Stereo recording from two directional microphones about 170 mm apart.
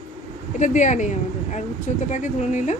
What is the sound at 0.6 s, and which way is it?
A woman's voice, 45° left (ahead or behind).